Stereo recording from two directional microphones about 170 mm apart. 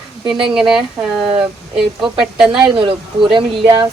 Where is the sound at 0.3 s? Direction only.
30° right (ahead or behind).